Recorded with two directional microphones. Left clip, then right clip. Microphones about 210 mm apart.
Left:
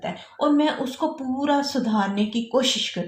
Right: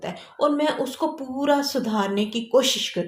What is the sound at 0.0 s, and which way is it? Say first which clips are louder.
A woman's voice: right 1 dB; 40° right (ahead or behind).